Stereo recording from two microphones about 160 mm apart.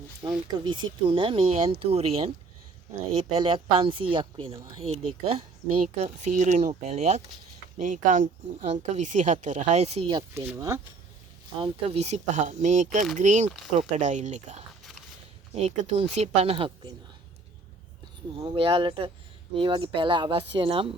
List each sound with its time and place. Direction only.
0.2 s speech: 25° right (ahead or behind)
10.3 s speech: 15° right (ahead or behind)
11.6 s speech: 40° right (ahead or behind)
18.3 s speech: 35° right (ahead or behind)